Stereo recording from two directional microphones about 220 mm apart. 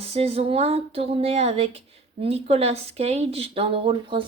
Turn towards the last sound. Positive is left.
turn(degrees=-25)  # may be behind; listen again after turning